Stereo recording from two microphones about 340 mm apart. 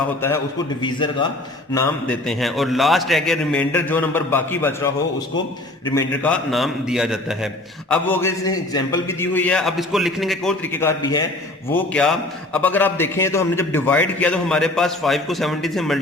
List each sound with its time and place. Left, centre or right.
0.8 s a man's voice: centre